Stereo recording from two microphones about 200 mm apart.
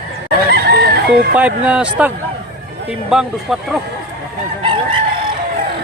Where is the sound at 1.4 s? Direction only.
5° right (ahead or behind).